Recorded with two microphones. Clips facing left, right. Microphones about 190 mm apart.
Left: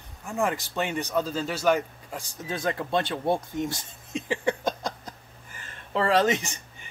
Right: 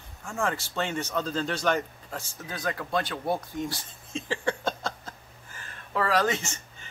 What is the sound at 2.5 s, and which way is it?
Speech, 25° left (ahead or behind).